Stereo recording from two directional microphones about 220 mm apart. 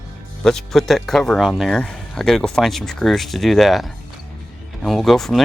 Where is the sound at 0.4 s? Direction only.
Centre (ahead or behind).